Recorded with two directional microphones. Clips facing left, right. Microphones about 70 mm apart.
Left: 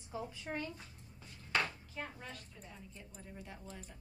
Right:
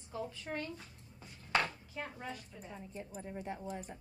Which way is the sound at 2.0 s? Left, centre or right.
Centre.